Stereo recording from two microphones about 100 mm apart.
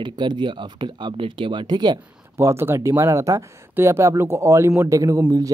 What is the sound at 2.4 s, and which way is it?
Speech, 25° right (ahead or behind).